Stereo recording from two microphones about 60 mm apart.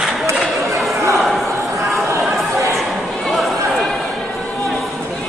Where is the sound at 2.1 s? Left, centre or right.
Right.